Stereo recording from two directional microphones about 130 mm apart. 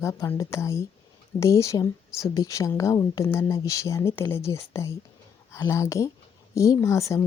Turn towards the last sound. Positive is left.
turn(degrees=20)  # may be behind; listen again after turning